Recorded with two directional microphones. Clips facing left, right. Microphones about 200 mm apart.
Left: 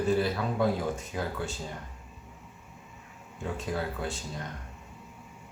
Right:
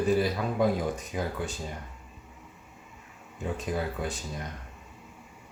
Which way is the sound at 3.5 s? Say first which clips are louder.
Right 1 dB; 15° right (ahead or behind).